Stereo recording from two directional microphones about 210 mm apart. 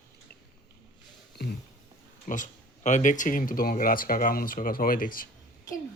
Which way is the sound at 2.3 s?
35° left (ahead or behind).